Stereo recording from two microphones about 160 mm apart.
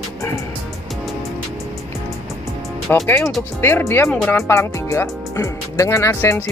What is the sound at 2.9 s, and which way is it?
Speech, 10° left (ahead or behind).